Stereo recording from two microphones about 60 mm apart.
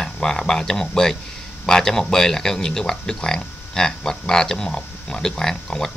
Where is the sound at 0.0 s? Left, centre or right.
Centre.